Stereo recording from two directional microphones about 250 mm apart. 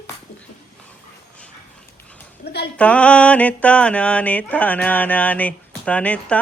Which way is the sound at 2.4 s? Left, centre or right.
Left.